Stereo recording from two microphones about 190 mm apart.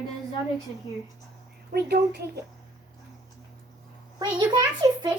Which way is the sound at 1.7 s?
55° right (ahead or behind).